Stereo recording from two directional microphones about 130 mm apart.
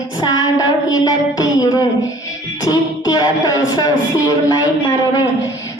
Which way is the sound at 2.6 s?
30° left (ahead or behind).